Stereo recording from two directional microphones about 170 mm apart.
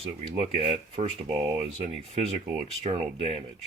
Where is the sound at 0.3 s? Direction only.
35° right (ahead or behind).